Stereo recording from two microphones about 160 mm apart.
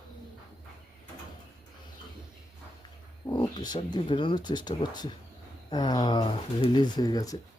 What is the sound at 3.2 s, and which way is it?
Speech, 25° left (ahead or behind).